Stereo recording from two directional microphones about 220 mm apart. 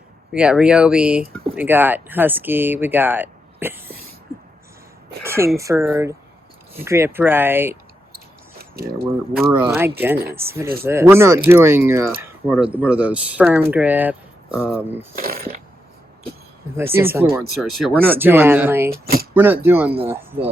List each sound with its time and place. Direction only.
0.3 s speech: 5° right (ahead or behind)
5.2 s a sound: 10° right (ahead or behind)
5.5 s speech: 10° right (ahead or behind)
8.7 s speech: 45° right (ahead or behind)
9.5 s speech: 10° right (ahead or behind)
15.2 s speech: 40° right (ahead or behind)
16.7 s speech: 10° right (ahead or behind)
19.0 s a sound: 45° right (ahead or behind)
19.3 s speech: 10° right (ahead or behind)